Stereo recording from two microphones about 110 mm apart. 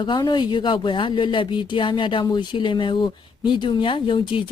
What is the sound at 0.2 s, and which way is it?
Speech, 45° left (ahead or behind).